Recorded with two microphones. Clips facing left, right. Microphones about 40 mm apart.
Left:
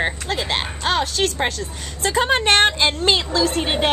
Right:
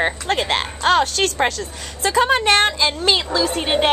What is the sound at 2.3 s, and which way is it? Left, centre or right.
Speech, left.